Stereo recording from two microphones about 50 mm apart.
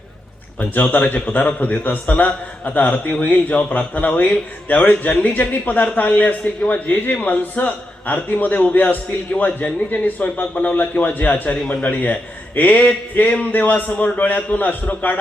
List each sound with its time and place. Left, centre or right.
0.6 s a man's voice: left